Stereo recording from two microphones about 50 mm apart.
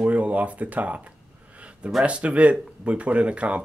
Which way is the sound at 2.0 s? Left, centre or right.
Right.